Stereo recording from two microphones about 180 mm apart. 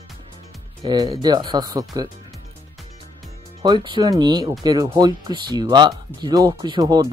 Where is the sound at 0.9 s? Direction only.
25° right (ahead or behind).